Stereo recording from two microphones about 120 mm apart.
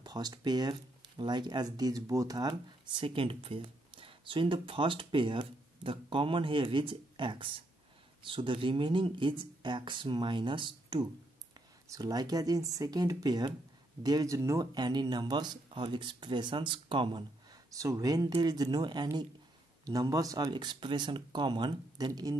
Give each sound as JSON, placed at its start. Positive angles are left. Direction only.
{"t": 0.0, "sound": "speech", "side_deg": -35}
{"t": 17.6, "sound": "speech", "side_deg": -30}